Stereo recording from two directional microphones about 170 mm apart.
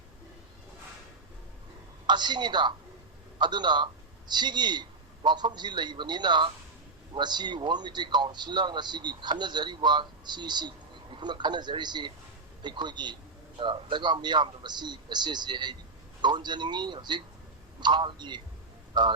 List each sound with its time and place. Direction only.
2.0 s speech: 25° right (ahead or behind)